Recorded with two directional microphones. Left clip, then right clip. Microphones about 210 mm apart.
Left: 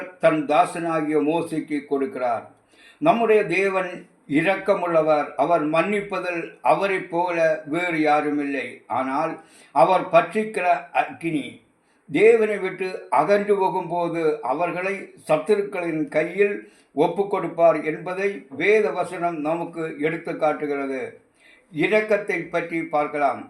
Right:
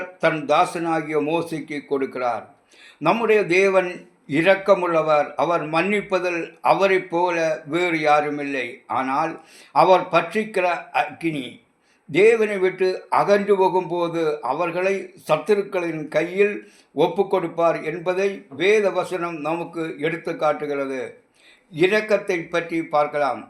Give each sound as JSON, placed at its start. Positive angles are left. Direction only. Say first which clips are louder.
{"t": 0.2, "sound": "a man's voice", "louder": "even", "side_deg": -30}